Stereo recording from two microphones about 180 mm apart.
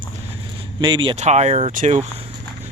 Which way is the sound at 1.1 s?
40° right (ahead or behind).